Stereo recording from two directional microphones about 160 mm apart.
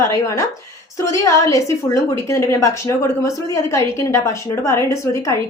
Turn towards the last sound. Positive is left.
turn(degrees=20)  # may be behind; listen again after turning